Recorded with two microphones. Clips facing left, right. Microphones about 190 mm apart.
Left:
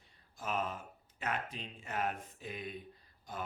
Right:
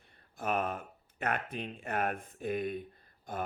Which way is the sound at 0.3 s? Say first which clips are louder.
Right 5 dB; 60° right (ahead or behind).